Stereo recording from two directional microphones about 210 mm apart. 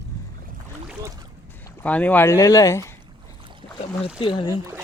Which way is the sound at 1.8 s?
5° left (ahead or behind).